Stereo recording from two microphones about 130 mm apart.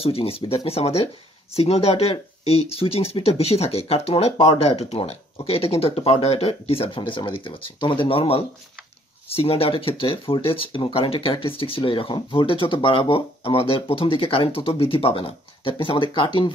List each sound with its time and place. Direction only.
0.0 s speech: 45° left (ahead or behind)